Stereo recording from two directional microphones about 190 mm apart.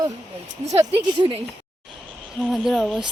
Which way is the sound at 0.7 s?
30° right (ahead or behind).